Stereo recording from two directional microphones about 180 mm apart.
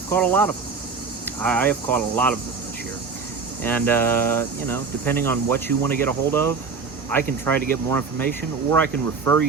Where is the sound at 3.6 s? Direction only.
10° left (ahead or behind).